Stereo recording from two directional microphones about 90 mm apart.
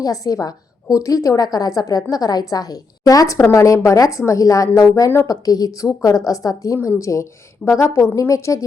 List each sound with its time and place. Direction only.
0.0 s a woman's voice: 40° left (ahead or behind)